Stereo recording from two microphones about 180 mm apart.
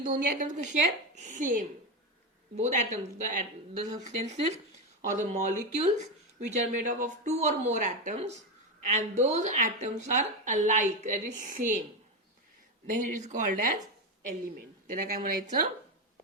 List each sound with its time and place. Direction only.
0.0 s a woman's voice: 50° right (ahead or behind)
12.9 s a woman's voice: 45° right (ahead or behind)
14.8 s a woman's voice: 50° right (ahead or behind)